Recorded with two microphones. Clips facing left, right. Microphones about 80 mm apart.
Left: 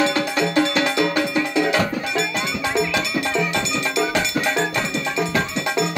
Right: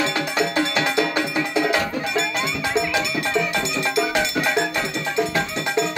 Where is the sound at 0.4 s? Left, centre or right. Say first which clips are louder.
Left 2 dB; centre.